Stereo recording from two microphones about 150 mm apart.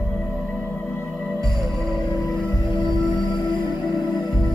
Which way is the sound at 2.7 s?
30° left (ahead or behind).